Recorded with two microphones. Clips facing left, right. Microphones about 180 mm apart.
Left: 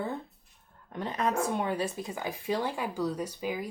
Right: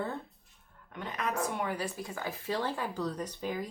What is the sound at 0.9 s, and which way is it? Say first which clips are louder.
Speech: left 5 dB; 30° left (ahead or behind).